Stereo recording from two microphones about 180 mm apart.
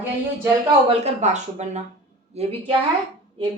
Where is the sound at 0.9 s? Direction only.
40° right (ahead or behind).